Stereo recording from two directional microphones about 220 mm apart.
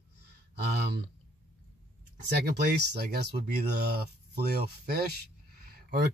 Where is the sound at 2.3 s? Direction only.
50° right (ahead or behind).